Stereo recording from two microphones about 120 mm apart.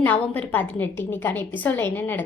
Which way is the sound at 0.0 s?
15° left (ahead or behind).